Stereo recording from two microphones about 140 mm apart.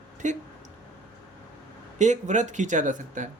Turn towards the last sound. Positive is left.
turn(degrees=-65)  # may be behind; listen again after turning